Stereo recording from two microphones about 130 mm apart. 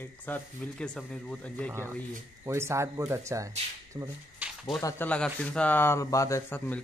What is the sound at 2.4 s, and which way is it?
Speech, 20° right (ahead or behind).